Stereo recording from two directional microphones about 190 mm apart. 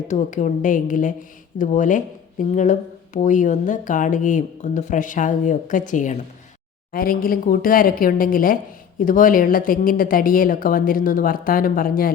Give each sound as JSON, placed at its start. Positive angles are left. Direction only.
{"t": 0.1, "sound": "a woman's voice", "side_deg": 40}